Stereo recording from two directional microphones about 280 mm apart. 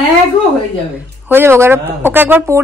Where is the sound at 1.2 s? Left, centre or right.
Centre.